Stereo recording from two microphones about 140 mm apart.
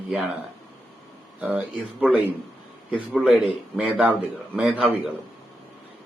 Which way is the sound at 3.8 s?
10° right (ahead or behind).